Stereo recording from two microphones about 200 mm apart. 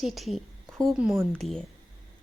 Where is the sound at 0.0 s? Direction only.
Centre (ahead or behind).